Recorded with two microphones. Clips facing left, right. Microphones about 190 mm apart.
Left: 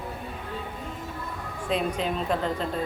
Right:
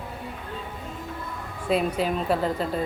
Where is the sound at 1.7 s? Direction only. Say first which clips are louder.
Right 3 dB; 5° right (ahead or behind).